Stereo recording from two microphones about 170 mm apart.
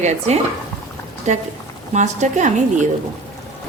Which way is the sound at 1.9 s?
45° right (ahead or behind).